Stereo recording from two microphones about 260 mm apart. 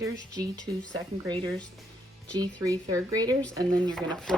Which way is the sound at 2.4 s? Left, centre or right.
Centre.